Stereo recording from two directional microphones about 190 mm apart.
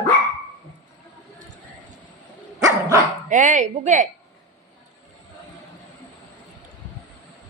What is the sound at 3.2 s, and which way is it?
Speech, 40° right (ahead or behind).